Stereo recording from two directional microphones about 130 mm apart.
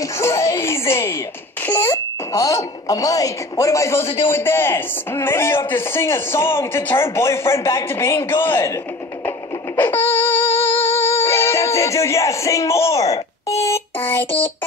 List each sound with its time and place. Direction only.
0.0 s a child's voice: 20° left (ahead or behind)
9.8 s music: 15° left (ahead or behind)
13.1 s a child's voice: 25° left (ahead or behind)